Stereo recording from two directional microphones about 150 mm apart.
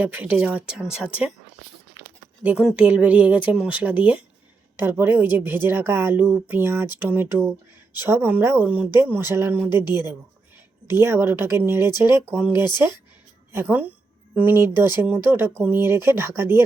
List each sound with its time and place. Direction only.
0.0 s a woman's voice: 10° right (ahead or behind)
2.4 s a woman's voice: 10° right (ahead or behind)
10.8 s a woman's voice: 15° right (ahead or behind)